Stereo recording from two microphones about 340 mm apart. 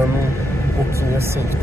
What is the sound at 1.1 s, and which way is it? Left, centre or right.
Speech, centre.